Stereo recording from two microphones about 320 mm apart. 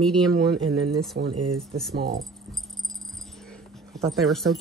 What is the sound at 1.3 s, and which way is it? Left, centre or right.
Speech, right.